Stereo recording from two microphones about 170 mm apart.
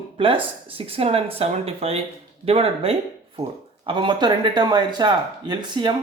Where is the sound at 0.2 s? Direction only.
30° right (ahead or behind).